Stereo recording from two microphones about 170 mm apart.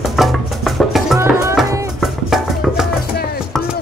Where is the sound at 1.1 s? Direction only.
15° right (ahead or behind).